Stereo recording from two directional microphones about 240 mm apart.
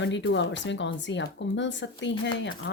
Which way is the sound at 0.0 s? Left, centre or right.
Left.